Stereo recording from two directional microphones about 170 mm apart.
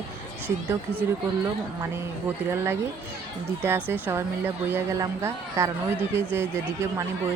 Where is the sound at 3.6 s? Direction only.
10° right (ahead or behind).